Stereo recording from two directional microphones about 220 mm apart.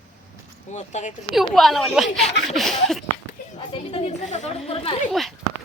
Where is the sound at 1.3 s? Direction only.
Centre (ahead or behind).